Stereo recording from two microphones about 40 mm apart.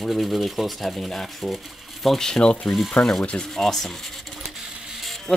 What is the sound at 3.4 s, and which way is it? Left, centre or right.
Speech, centre.